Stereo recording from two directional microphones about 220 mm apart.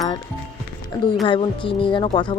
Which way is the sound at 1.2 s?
20° left (ahead or behind).